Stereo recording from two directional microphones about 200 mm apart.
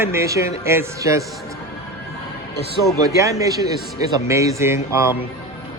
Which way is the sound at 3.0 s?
15° right (ahead or behind).